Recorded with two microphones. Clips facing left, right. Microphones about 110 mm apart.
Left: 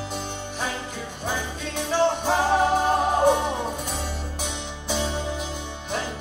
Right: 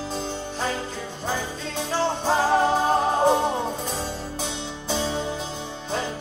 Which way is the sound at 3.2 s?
35° right (ahead or behind).